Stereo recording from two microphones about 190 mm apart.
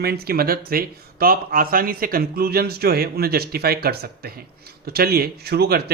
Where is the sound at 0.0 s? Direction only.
55° right (ahead or behind).